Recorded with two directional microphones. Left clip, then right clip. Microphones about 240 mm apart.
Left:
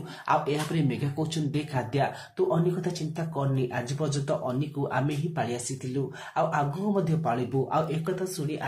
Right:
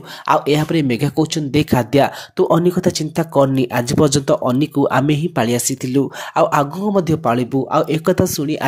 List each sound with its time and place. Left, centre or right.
0.3 s speech: right